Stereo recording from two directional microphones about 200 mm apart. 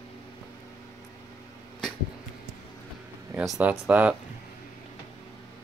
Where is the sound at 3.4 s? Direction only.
5° right (ahead or behind).